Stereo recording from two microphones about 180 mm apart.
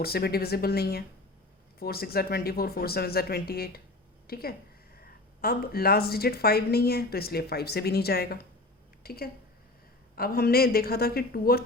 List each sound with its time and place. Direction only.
0.0 s a woman's voice: 60° left (ahead or behind)